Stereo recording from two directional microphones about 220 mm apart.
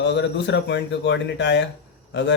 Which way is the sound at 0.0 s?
55° left (ahead or behind).